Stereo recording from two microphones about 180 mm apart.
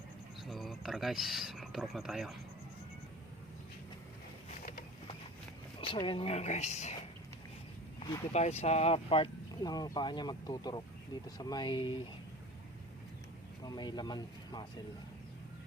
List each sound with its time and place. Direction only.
0.4 s speech: centre (ahead or behind)
5.8 s speech: 30° left (ahead or behind)
8.3 s speech: 35° left (ahead or behind)
13.7 s speech: 25° left (ahead or behind)